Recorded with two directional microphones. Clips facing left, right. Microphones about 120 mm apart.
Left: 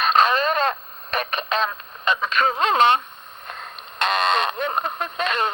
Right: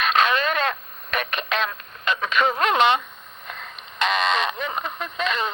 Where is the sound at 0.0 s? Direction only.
35° left (ahead or behind).